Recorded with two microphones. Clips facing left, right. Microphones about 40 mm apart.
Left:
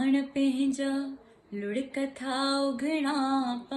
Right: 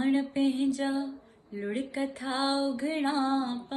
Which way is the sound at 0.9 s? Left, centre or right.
Left.